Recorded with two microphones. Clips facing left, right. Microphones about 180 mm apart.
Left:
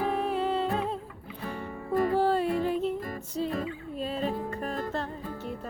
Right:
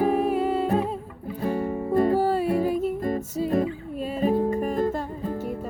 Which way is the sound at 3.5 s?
45° right (ahead or behind).